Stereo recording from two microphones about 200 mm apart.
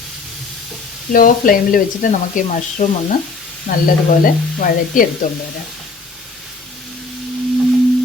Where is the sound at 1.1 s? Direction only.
45° left (ahead or behind).